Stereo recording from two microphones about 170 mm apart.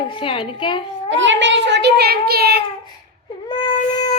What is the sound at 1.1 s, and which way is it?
A child's voice, 90° right.